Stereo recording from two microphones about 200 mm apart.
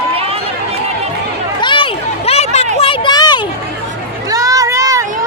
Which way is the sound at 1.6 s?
25° left (ahead or behind).